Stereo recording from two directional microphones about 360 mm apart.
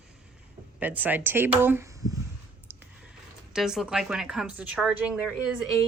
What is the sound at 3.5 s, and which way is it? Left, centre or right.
Speech, centre.